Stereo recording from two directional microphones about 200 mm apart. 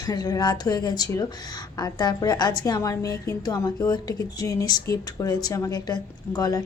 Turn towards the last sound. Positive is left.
turn(degrees=20)  # may be behind; listen again after turning